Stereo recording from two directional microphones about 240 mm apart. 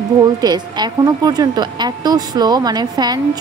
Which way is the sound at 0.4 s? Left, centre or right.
Centre.